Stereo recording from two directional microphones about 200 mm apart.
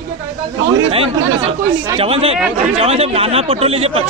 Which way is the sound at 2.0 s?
30° right (ahead or behind).